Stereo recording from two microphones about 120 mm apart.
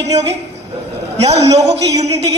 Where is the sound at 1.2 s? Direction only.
60° right (ahead or behind).